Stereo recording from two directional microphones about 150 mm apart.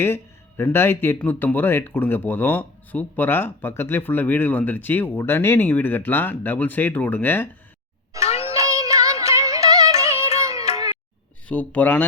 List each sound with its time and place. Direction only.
0.0 s speech: 15° left (ahead or behind)
8.2 s a sound: 40° left (ahead or behind)
8.8 s music: 25° right (ahead or behind)
10.2 s music: 45° left (ahead or behind)
10.4 s music: 20° right (ahead or behind)
11.4 s speech: 10° left (ahead or behind)